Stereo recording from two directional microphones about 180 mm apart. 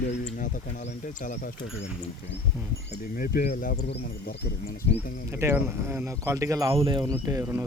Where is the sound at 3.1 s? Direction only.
55° left (ahead or behind).